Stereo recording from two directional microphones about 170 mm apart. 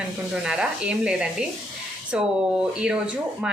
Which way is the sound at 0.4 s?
5° right (ahead or behind).